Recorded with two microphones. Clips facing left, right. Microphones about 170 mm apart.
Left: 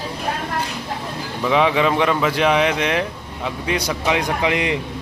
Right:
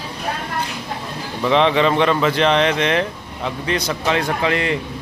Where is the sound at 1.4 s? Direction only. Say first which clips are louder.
Right 2 dB; 5° left (ahead or behind).